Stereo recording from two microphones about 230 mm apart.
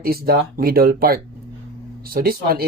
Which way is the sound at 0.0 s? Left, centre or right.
Right.